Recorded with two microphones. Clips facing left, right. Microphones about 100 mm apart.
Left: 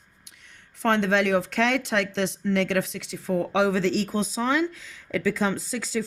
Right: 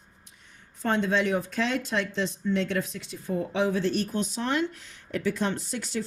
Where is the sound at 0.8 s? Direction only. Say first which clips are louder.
Left 3 dB; 75° left (ahead or behind); by 4.1 s 90° left.